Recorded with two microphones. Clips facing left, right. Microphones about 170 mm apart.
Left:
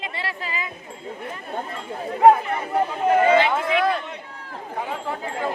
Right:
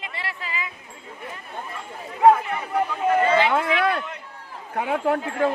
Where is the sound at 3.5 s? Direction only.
65° right (ahead or behind).